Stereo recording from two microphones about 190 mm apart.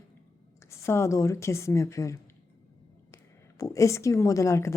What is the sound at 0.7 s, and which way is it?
A woman's voice, 15° left (ahead or behind).